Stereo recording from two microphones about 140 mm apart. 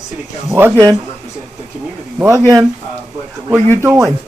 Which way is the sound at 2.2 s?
20° right (ahead or behind).